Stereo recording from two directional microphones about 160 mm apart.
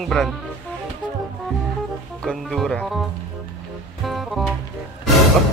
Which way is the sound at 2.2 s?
Centre (ahead or behind).